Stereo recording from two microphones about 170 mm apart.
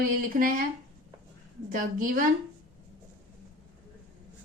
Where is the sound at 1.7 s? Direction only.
55° right (ahead or behind).